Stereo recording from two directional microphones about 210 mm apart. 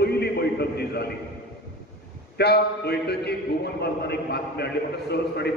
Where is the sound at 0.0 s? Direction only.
50° left (ahead or behind).